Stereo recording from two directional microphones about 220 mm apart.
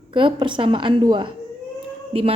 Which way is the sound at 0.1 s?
20° right (ahead or behind).